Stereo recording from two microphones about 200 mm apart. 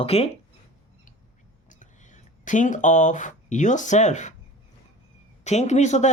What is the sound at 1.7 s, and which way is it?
Speech, 40° left (ahead or behind).